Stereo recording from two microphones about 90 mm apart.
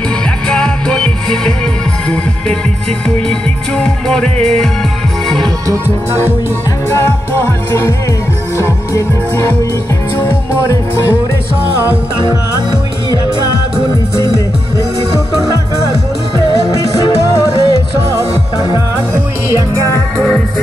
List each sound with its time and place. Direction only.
0.5 s music: 10° left (ahead or behind)
3.3 s music: 10° left (ahead or behind)
6.9 s music: 25° left (ahead or behind)
16.8 s music: 40° left (ahead or behind)
20.2 s music: 10° left (ahead or behind)